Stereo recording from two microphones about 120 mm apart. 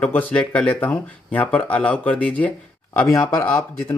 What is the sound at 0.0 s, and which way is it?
Speech, 10° left (ahead or behind).